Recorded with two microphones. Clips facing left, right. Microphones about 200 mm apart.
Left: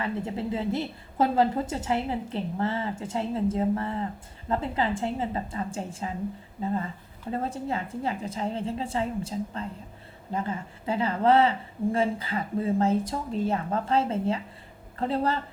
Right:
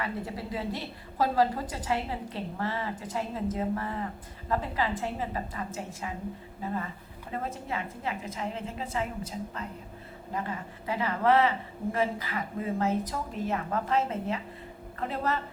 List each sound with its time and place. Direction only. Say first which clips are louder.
0.0 s a woman's voice: left 4 dB; 25° left (ahead or behind)
7.3 s a woman's voice: left 5 dB; 35° left (ahead or behind)